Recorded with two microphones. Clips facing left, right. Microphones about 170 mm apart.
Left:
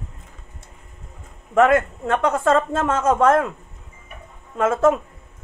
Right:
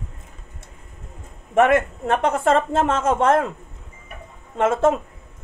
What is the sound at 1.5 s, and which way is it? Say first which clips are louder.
Speech: left 1 dB; 25° right (ahead or behind).